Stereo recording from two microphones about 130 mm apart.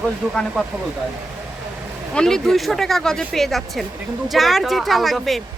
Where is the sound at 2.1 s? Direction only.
5° left (ahead or behind).